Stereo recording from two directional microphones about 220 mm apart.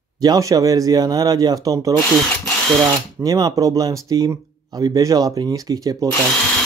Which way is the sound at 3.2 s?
15° right (ahead or behind).